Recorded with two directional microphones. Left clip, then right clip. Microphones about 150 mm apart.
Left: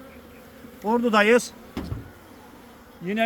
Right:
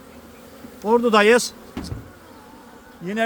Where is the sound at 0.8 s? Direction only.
75° right (ahead or behind); by 1.5 s 90° right.